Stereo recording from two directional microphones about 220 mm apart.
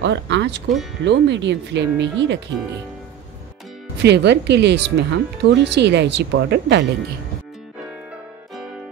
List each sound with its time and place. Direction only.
0.0 s speech: 55° right (ahead or behind)
4.0 s speech: 50° right (ahead or behind)